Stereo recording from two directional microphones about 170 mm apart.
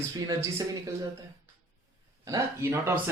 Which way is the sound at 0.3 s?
20° right (ahead or behind).